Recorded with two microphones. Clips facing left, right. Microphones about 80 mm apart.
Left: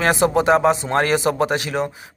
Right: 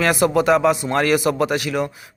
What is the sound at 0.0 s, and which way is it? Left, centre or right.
Speech, left.